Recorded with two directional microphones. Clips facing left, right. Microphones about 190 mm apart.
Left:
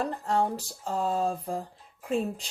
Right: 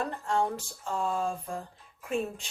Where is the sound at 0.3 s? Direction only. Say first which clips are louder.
Left 1 dB; 35° left (ahead or behind).